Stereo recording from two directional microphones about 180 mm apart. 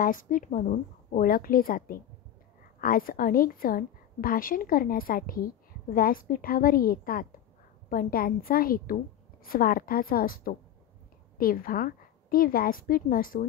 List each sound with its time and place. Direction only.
0.0 s a woman's voice: 50° left (ahead or behind)